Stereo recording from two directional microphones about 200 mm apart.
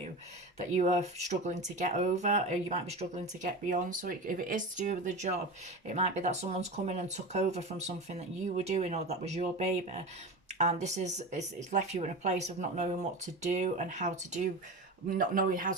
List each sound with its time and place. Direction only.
0.8 s speech: 35° right (ahead or behind)